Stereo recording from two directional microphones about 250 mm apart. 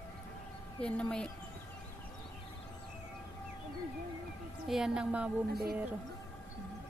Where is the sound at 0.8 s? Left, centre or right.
Centre.